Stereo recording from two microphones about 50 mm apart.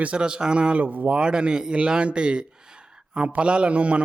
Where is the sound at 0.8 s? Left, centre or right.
Right.